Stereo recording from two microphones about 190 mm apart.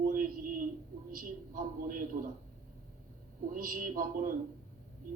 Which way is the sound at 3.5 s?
45° right (ahead or behind).